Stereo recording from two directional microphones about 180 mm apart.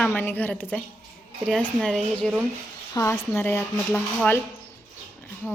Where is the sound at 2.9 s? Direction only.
15° left (ahead or behind).